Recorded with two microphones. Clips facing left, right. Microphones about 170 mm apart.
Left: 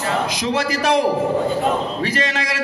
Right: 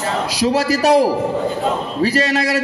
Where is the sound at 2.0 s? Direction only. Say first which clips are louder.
Right 6 dB; 35° right (ahead or behind).